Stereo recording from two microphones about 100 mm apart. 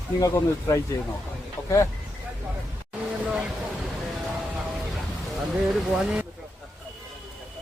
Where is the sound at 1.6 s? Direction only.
30° left (ahead or behind).